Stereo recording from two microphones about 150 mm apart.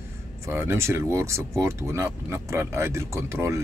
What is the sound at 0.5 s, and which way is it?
Speech, 15° right (ahead or behind).